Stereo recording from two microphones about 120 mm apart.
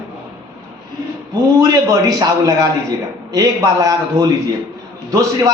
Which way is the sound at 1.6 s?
25° right (ahead or behind).